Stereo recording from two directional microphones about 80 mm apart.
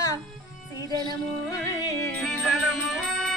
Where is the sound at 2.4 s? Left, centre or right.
Centre.